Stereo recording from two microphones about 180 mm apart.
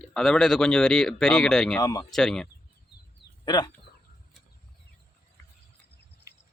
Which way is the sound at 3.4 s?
25° left (ahead or behind).